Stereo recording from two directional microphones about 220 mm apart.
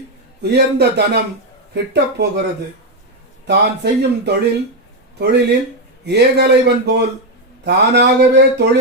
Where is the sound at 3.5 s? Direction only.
50° right (ahead or behind).